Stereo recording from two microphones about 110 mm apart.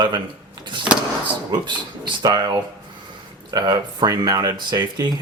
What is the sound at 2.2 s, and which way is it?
Speech, 35° right (ahead or behind).